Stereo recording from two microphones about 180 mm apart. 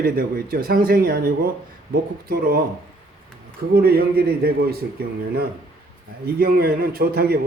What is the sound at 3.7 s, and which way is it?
A man's voice, 60° right (ahead or behind).